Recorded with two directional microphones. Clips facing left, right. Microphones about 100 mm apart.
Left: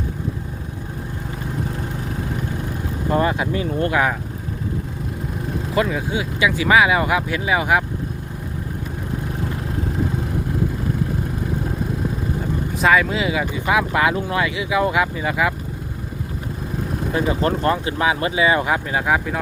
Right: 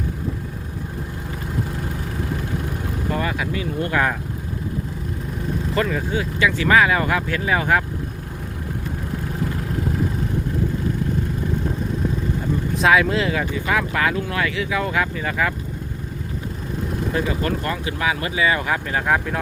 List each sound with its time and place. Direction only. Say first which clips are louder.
3.1 s speech: left 6 dB; 30° left (ahead or behind)
5.7 s speech: left 2 dB; 10° left (ahead or behind)
12.8 s speech: even; centre (ahead or behind)
17.2 s speech: left 4 dB; 30° left (ahead or behind); by 19.4 s 5° left (ahead or behind)